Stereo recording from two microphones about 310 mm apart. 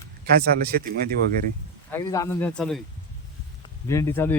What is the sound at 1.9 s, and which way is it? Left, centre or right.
Speech, centre.